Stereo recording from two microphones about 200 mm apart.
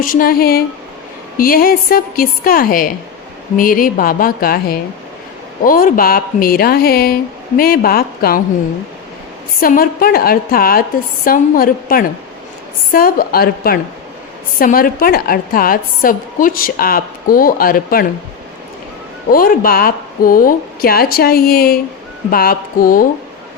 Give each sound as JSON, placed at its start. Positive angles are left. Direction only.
{"t": 0.0, "sound": "a woman's voice", "side_deg": 45}
{"t": 9.6, "sound": "a woman's voice", "side_deg": 45}
{"t": 19.3, "sound": "a woman's voice", "side_deg": 45}